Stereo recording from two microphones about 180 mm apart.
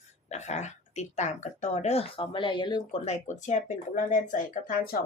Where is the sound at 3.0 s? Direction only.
40° left (ahead or behind).